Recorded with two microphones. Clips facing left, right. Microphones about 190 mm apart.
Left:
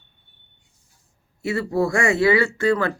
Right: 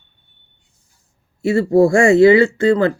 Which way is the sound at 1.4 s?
25° right (ahead or behind).